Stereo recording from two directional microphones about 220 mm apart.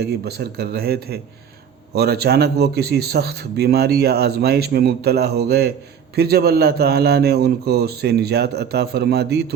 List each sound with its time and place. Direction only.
0.0 s a man's voice: 45° right (ahead or behind)